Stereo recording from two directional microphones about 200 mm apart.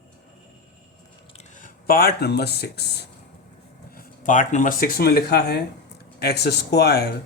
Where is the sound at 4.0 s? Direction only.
40° left (ahead or behind).